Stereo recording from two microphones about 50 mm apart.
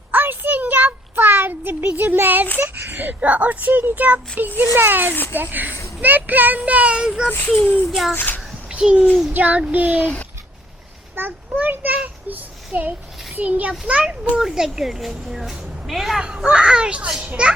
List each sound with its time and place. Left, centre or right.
0.1 s a sound: right
2.6 s a child's voice: right
4.7 s a child's voice: right
7.3 s speech: left
7.9 s child singing: centre
8.1 s speech: left
8.8 s a child's voice: right
11.1 s a child's voice: right
12.0 s child singing: right
13.3 s a child's voice: right
14.3 s a woman's voice: centre
16.2 s a child's voice: centre